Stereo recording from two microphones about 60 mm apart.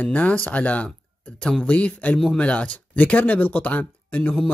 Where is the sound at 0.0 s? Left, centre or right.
Left.